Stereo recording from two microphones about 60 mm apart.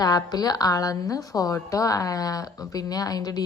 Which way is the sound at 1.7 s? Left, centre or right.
Left.